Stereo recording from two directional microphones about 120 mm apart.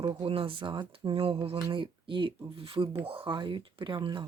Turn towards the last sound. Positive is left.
turn(degrees=-40)  # may be behind; listen again after turning